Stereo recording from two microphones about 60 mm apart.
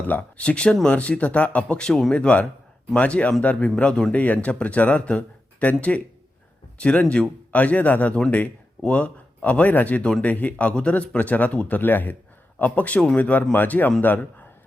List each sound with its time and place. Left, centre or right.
0.1 s speech: left; by 2.1 s centre
2.1 s speech: left
11.8 s a man's voice: left